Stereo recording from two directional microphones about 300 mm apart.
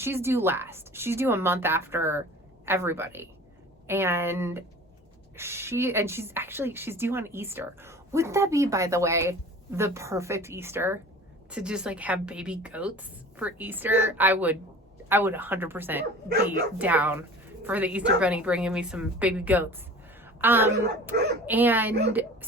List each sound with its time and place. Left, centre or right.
0.0 s a woman's voice: centre
20.2 s a sound: centre
21.1 s speech: right
21.4 s a woman's voice: centre